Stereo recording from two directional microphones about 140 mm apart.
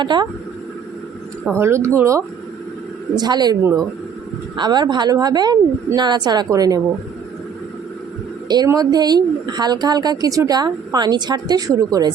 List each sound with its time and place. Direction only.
0.0 s speech: 35° right (ahead or behind)
1.5 s speech: 20° right (ahead or behind)
8.4 s speech: 25° right (ahead or behind)